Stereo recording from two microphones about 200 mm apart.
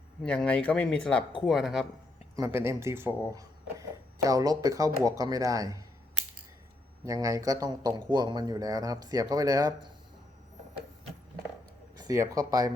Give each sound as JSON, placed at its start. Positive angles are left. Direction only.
{"t": 0.2, "sound": "speech", "side_deg": 5}
{"t": 2.3, "sound": "speech", "side_deg": -15}
{"t": 7.0, "sound": "speech", "side_deg": -15}
{"t": 11.9, "sound": "speech", "side_deg": -15}